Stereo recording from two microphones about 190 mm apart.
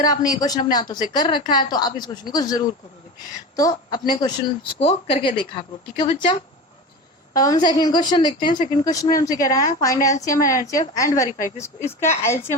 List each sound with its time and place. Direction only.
0.0 s a woman's voice: 20° left (ahead or behind)
7.3 s a woman's voice: 20° left (ahead or behind)